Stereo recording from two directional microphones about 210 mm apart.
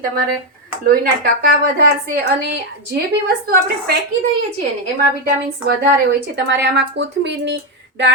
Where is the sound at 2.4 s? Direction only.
50° right (ahead or behind).